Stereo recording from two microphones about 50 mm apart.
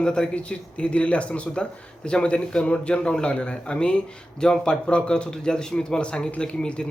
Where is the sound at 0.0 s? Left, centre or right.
Centre.